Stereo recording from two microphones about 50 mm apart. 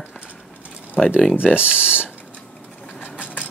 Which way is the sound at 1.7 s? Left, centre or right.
Right.